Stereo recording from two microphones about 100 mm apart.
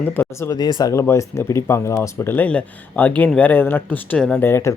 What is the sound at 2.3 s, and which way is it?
Speech, 15° left (ahead or behind).